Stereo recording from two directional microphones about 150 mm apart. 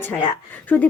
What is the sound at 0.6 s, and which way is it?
Speech, 10° left (ahead or behind).